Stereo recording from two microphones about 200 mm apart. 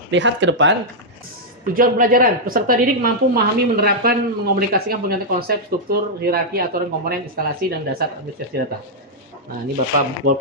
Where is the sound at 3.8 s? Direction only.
50° right (ahead or behind).